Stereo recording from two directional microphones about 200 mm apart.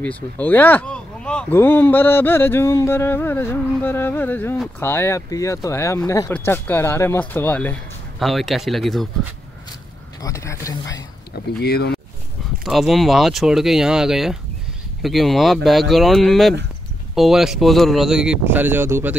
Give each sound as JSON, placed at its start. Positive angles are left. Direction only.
{"t": 0.0, "sound": "speech", "side_deg": 10}
{"t": 10.2, "sound": "speech", "side_deg": 15}
{"t": 11.6, "sound": "speech", "side_deg": 55}
{"t": 12.6, "sound": "speech", "side_deg": 0}